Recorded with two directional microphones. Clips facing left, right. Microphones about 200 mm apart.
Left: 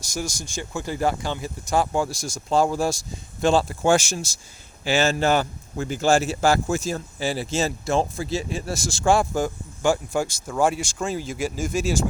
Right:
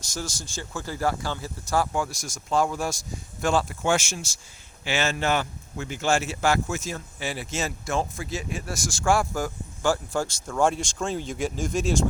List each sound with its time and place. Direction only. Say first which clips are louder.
0.1 s speech: left 4 dB; 15° left (ahead or behind)